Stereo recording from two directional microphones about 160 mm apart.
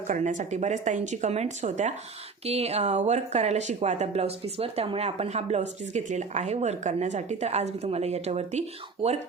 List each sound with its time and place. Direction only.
0.1 s speech: 50° right (ahead or behind)